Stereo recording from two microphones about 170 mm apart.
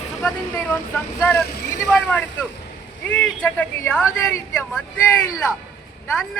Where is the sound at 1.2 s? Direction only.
10° left (ahead or behind).